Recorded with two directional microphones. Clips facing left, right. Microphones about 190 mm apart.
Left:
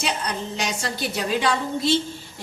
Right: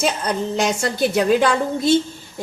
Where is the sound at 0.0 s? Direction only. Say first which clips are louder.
Right 6 dB; 50° right (ahead or behind).